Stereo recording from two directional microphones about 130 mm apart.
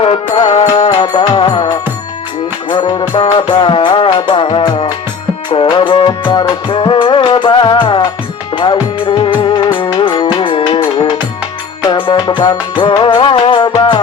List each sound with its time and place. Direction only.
0.0 s music: 40° left (ahead or behind)
0.9 s music: 30° left (ahead or behind)